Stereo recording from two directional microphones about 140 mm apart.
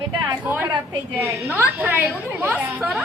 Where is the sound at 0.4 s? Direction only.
15° right (ahead or behind).